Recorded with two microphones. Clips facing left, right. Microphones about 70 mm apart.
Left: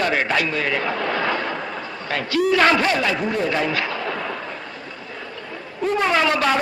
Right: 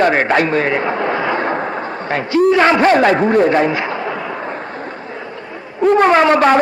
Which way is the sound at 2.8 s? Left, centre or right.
Right.